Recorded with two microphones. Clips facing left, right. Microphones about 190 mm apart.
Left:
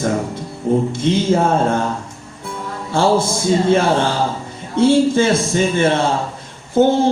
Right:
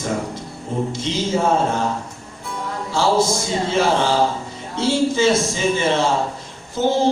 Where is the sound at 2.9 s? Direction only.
55° left (ahead or behind).